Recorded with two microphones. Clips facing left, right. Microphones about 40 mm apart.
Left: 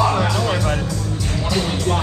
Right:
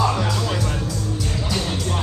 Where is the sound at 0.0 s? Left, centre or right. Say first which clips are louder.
Left 3 dB; left.